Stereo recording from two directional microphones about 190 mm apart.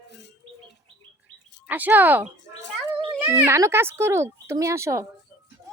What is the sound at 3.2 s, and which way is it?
Speech, 15° right (ahead or behind).